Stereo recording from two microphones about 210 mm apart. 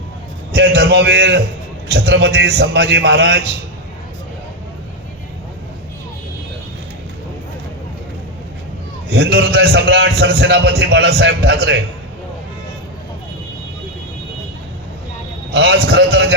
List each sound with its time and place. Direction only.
0.5 s a man's voice: 50° right (ahead or behind)
9.0 s a man's voice: 55° right (ahead or behind)
15.5 s a man's voice: 55° right (ahead or behind)